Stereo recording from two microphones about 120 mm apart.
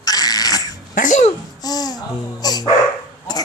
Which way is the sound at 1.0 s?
85° left.